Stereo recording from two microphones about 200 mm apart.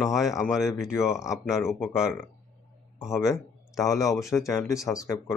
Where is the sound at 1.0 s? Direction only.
15° left (ahead or behind).